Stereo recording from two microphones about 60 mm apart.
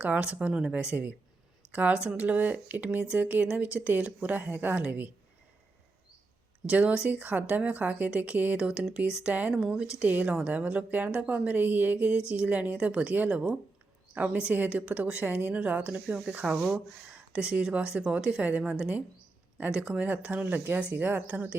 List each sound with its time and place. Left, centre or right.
0.0 s speech: right
6.7 s speech: right
10.1 s speech: right